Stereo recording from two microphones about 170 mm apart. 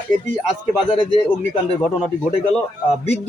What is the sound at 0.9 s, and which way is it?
Speech, 30° left (ahead or behind).